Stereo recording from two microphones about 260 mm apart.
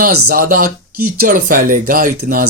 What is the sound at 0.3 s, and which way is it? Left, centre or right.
Speech, right.